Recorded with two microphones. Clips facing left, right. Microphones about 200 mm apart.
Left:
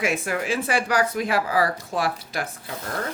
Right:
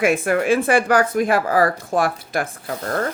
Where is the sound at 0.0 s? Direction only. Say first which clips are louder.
Right 7 dB; 55° right (ahead or behind).